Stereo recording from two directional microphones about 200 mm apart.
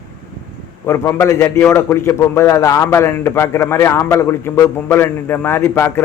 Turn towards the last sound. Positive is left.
turn(degrees=10)  # may be behind; listen again after turning